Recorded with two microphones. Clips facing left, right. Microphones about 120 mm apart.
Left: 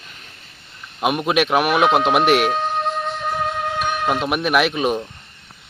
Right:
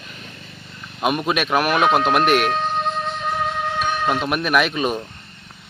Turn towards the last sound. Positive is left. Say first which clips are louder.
# left 1 dB
turn(degrees=10)  # may be behind; listen again after turning